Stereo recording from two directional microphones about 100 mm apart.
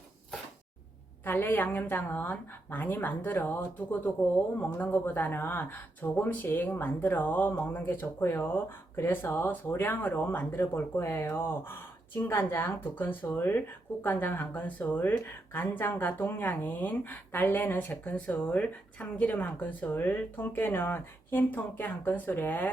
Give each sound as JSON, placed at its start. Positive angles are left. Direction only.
{"t": 1.2, "sound": "speech", "side_deg": 20}